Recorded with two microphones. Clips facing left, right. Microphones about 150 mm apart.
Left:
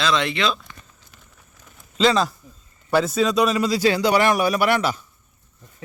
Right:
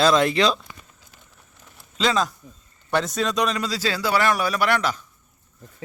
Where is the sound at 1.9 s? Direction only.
Centre (ahead or behind).